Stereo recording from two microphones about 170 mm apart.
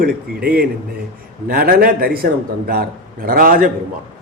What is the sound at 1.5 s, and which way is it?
A man's voice, 60° right (ahead or behind).